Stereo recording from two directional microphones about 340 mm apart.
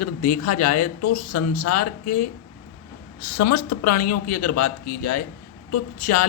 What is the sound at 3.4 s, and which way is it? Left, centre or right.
Speech, left.